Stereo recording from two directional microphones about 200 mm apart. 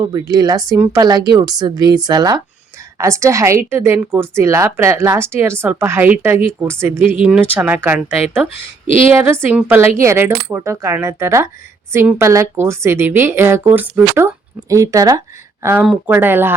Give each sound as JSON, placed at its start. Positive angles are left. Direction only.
{"t": 0.0, "sound": "a woman's voice", "side_deg": -20}